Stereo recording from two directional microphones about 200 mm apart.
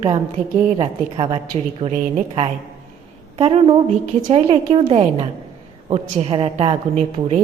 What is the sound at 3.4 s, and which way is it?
A woman's voice, 30° right (ahead or behind).